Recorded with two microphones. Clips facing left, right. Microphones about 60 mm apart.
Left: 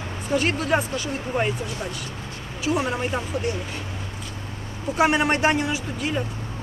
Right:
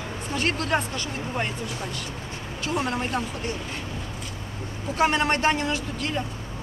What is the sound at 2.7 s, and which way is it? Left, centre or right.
Speech, centre.